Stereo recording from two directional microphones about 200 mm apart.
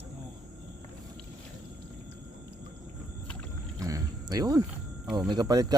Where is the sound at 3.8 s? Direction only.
15° right (ahead or behind).